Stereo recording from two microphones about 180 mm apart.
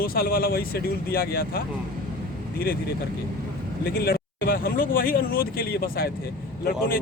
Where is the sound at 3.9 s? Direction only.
60° left (ahead or behind).